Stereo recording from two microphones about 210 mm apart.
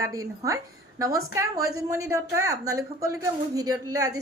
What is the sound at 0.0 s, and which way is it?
A woman's voice, 15° right (ahead or behind).